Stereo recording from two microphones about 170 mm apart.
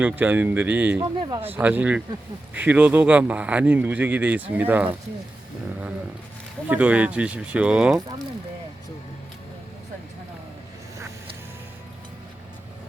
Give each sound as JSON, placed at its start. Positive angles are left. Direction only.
{"t": 0.0, "sound": "speech", "side_deg": -10}
{"t": 1.0, "sound": "speech", "side_deg": -30}
{"t": 1.4, "sound": "speech", "side_deg": -10}
{"t": 6.7, "sound": "speech", "side_deg": -10}